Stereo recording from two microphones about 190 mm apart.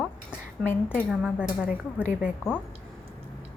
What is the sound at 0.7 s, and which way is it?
Speech, 10° left (ahead or behind).